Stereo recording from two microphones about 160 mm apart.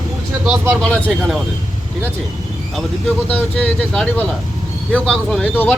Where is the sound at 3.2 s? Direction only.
10° left (ahead or behind).